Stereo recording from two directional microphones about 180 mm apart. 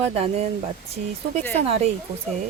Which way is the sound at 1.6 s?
35° right (ahead or behind).